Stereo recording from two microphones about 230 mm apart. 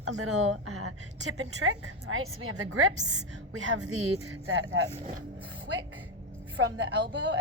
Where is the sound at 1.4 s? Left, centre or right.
Right.